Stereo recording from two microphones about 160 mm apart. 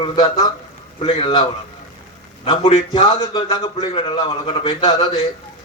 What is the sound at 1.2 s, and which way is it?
A man's voice, 30° left (ahead or behind).